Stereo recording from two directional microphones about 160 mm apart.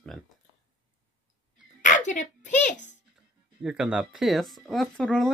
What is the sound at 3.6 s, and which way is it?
Speech, 5° right (ahead or behind).